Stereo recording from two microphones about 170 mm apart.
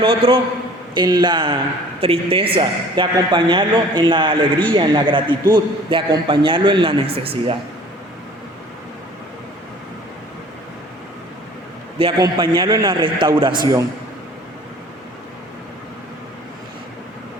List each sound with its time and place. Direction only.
0.0 s a man's voice: 30° right (ahead or behind)
11.9 s a man's voice: 30° right (ahead or behind)